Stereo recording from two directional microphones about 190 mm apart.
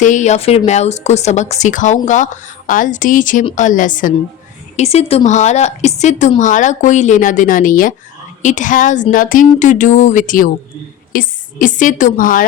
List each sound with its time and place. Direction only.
0.0 s a woman's voice: 40° left (ahead or behind)
4.8 s a woman's voice: 35° left (ahead or behind)